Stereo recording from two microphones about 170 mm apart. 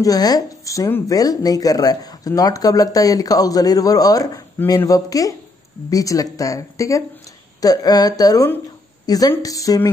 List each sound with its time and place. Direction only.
0.0 s speech: 20° left (ahead or behind)